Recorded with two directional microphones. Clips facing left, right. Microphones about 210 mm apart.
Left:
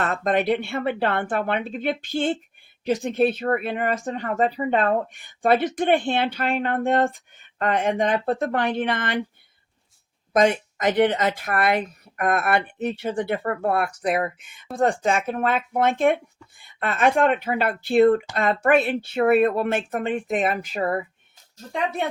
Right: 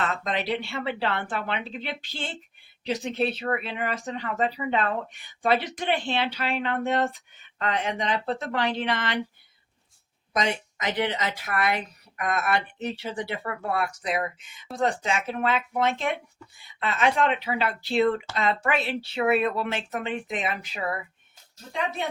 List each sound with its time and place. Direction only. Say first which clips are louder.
0.0 s speech: left 6 dB; 50° left (ahead or behind)
10.3 s speech: left 8 dB; 50° left (ahead or behind)
22.0 s speech: left 5 dB; 55° left (ahead or behind)